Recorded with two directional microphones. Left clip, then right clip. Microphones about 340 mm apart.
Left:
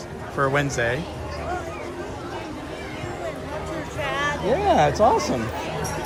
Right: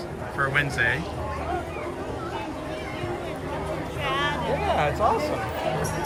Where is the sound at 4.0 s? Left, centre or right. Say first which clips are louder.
Left 1 dB; left.